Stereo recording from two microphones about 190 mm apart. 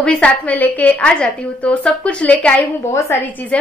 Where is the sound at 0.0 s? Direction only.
5° left (ahead or behind).